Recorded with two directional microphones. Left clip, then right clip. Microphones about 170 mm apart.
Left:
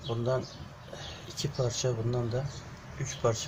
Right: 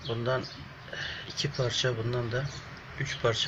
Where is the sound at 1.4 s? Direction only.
10° left (ahead or behind).